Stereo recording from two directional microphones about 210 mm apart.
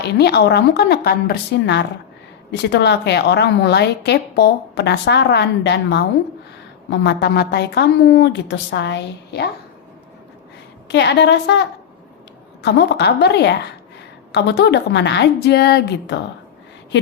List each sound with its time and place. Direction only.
0.0 s a woman's voice: 50° left (ahead or behind)
10.8 s a woman's voice: 55° left (ahead or behind)